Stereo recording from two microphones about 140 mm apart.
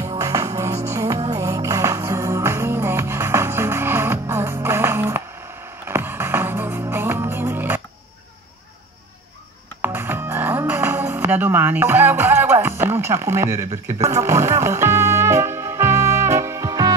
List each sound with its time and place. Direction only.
0.2 s music: 25° right (ahead or behind)
9.8 s music: 15° right (ahead or behind)